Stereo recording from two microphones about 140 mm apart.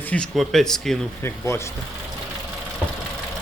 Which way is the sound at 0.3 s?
5° left (ahead or behind).